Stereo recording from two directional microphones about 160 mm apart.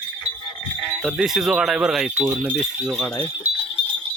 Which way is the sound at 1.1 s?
Centre (ahead or behind).